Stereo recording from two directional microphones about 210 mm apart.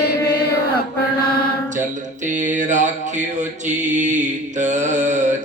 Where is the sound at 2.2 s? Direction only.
35° right (ahead or behind).